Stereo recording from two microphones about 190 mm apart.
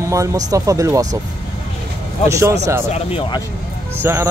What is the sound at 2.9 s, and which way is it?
Speech, 30° left (ahead or behind).